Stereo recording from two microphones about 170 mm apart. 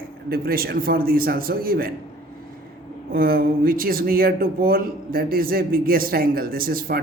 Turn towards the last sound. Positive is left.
turn(degrees=-60)  # may be behind; listen again after turning